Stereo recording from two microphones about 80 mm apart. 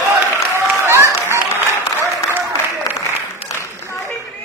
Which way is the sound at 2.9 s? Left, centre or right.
Left.